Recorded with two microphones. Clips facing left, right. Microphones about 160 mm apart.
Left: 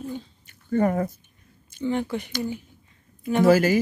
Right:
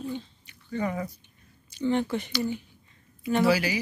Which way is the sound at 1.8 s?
10° left (ahead or behind).